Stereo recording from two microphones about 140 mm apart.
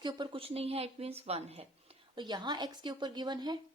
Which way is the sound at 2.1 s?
30° right (ahead or behind).